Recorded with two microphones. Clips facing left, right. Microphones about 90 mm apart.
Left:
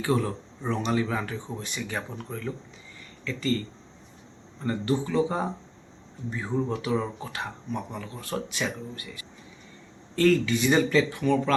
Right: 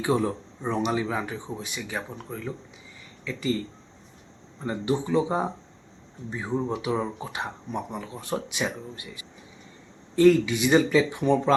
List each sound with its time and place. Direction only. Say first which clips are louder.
0.0 s speech: right 2 dB; 20° right (ahead or behind)
4.6 s speech: even; 15° right (ahead or behind)
11.2 s speech: right 2 dB; 25° right (ahead or behind)